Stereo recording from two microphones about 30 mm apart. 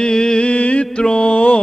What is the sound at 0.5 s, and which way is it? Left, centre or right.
Music, left.